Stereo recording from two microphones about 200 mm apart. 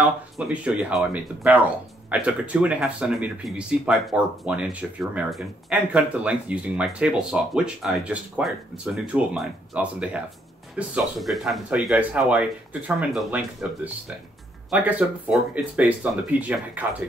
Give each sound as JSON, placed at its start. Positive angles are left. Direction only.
{"t": 0.0, "sound": "speech", "side_deg": -5}